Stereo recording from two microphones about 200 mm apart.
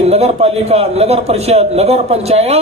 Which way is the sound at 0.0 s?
30° right (ahead or behind).